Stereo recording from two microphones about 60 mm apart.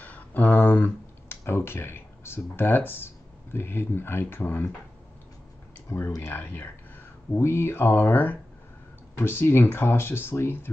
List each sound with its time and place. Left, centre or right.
0.0 s speech: left
5.9 s speech: left